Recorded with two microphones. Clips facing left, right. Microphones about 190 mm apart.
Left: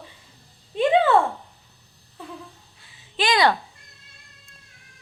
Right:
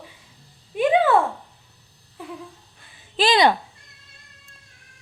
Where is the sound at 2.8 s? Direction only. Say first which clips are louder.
Right 4 dB; 55° right (ahead or behind).